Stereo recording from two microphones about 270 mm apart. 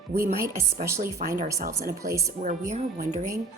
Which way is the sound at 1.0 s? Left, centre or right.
Right.